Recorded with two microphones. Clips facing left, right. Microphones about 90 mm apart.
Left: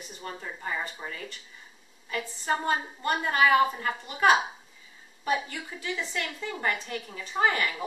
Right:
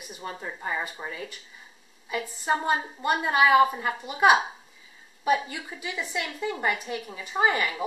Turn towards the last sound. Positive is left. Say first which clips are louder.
# right 2 dB
turn(degrees=-15)  # may be behind; listen again after turning